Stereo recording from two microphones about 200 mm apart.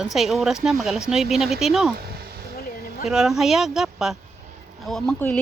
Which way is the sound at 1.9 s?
50° right (ahead or behind).